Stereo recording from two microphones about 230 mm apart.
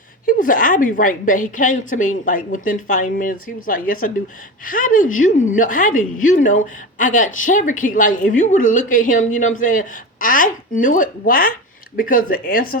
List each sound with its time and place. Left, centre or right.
0.3 s a woman's voice: left